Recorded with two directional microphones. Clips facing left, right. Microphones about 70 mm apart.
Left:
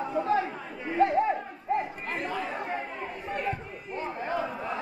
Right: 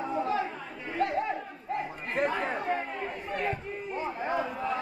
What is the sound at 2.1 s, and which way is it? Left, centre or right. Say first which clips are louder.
Chatter: right 5 dB; right.